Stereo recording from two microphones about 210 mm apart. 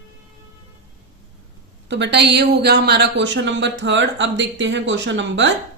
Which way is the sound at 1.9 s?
55° right (ahead or behind).